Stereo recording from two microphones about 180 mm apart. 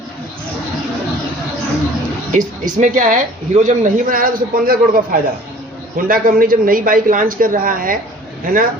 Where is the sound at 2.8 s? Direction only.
45° right (ahead or behind).